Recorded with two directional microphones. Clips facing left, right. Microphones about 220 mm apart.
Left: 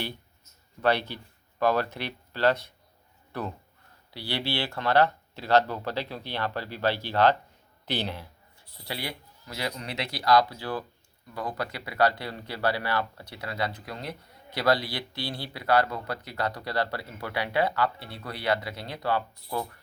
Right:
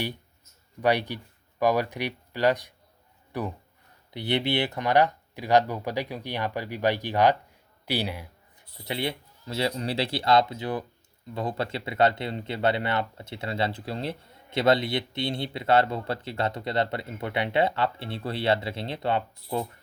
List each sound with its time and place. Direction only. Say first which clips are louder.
0.8 s speech: right 1 dB; 15° right (ahead or behind)